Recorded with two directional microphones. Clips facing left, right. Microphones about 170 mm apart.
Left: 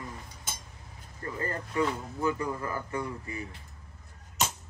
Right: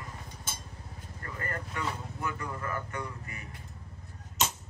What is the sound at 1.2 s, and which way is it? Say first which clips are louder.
Speech: left 4 dB; 30° left (ahead or behind).